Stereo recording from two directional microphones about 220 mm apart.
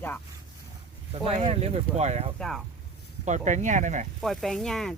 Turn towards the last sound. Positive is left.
turn(degrees=0)  # may be behind; listen again after turning